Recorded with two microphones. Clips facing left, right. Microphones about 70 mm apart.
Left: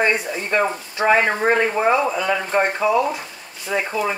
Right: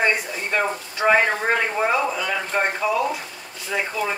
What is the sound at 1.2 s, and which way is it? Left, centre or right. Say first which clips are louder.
Speech: left 4 dB; centre.